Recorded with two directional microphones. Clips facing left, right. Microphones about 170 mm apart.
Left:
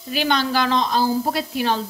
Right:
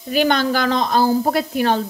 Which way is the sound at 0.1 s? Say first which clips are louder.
Right 4 dB; 50° right (ahead or behind).